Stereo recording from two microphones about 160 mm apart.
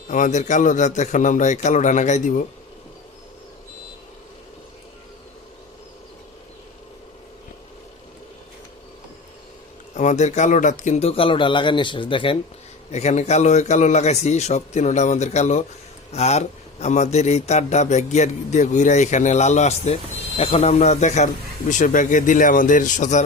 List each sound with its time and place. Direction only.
0.1 s a man's voice: 50° left (ahead or behind)
9.9 s speech: 50° left (ahead or behind); by 12.4 s 30° left (ahead or behind)
12.9 s a man's voice: 45° left (ahead or behind)